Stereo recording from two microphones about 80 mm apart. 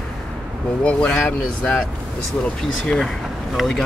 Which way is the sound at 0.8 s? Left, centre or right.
Centre.